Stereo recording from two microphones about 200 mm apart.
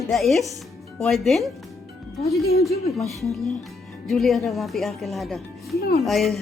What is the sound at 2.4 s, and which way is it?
Speech, 50° left (ahead or behind).